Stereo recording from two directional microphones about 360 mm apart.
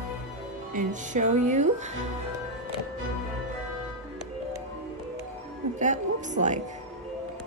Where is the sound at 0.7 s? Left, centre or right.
Centre.